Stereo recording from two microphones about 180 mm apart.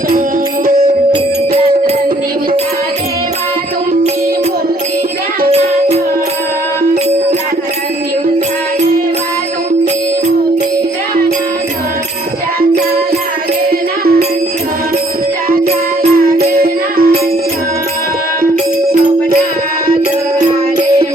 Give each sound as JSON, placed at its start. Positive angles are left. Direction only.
{"t": 13.7, "sound": "music", "side_deg": -55}
{"t": 15.4, "sound": "music", "side_deg": -55}